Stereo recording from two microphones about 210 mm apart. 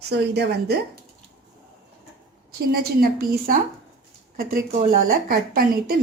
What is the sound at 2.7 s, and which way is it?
Speech, 45° right (ahead or behind).